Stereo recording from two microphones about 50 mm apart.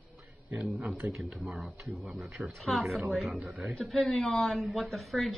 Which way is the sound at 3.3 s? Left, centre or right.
Right.